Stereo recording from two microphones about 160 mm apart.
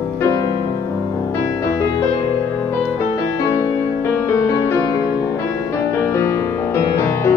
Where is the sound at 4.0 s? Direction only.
15° left (ahead or behind).